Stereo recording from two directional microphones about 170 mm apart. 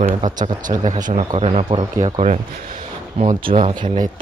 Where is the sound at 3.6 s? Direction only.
45° right (ahead or behind).